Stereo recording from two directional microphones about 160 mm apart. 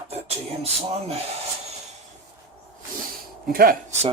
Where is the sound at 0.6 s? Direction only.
40° right (ahead or behind).